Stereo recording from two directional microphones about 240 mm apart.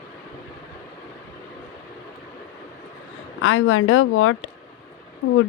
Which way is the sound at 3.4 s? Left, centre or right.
Left.